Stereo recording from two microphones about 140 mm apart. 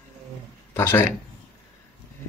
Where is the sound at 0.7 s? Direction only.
15° left (ahead or behind).